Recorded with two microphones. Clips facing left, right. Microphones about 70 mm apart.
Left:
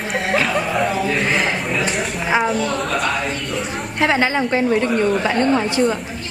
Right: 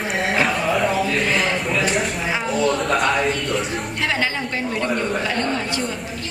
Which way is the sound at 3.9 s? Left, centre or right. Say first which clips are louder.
Left 7 dB; left.